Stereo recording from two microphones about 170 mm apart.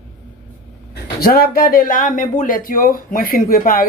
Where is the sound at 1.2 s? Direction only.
60° left (ahead or behind).